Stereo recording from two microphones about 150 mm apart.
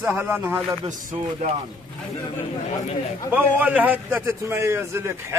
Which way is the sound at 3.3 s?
10° right (ahead or behind).